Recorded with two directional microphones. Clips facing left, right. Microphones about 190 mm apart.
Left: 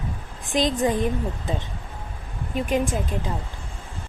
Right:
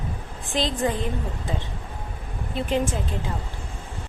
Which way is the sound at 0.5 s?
15° left (ahead or behind).